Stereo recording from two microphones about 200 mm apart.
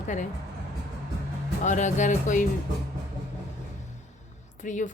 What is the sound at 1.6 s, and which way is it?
Speech, 35° left (ahead or behind).